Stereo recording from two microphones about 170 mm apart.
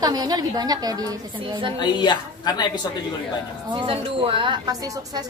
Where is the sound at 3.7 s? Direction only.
30° right (ahead or behind).